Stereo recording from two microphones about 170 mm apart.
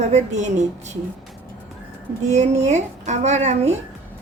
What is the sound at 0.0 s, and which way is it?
Speech, 40° right (ahead or behind).